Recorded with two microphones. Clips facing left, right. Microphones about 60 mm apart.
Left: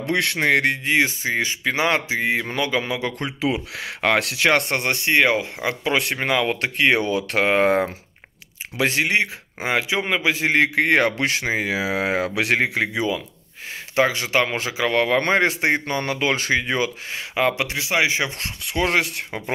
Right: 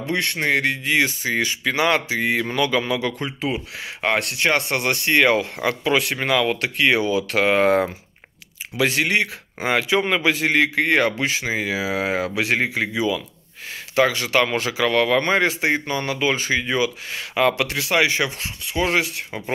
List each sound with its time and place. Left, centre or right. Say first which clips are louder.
0.0 s speech: left 2 dB; left
0.8 s speech: even; left
3.2 s speech: left 2 dB; left
4.6 s speech: even; left; by 5.8 s centre
5.9 s speech: right 1 dB; left
7.0 s speech: right 1 dB; left
9.0 s speech: even; centre
10.6 s speech: left 2 dB; left
11.1 s speech: left 1 dB; left
11.4 s speech: left 1 dB; left
12.4 s speech: left 1 dB; left
13.9 s speech: right 1 dB; left
17.1 s speech: right 2 dB; centre
18.4 s speech: even; left